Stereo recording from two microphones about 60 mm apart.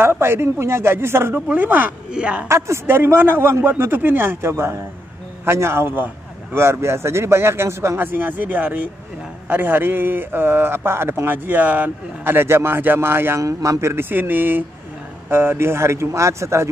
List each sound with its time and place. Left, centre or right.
0.0 s a man's voice: right
1.5 s speech: right
2.1 s speech: centre
2.4 s a man's voice: right
8.0 s speech: right
13.4 s a man's voice: right